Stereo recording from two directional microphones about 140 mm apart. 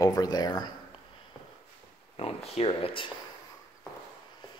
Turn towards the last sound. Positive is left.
turn(degrees=40)  # may be behind; listen again after turning